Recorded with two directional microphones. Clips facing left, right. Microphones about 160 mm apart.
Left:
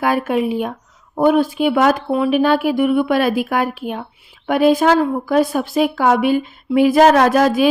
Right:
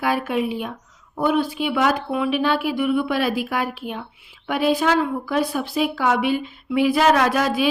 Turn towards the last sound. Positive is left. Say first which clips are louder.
# left 6 dB
turn(degrees=45)  # may be behind; listen again after turning